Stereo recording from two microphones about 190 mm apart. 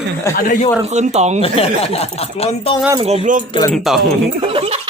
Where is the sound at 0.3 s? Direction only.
45° left (ahead or behind).